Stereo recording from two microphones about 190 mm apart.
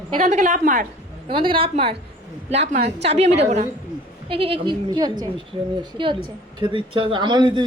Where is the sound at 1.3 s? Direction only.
25° right (ahead or behind).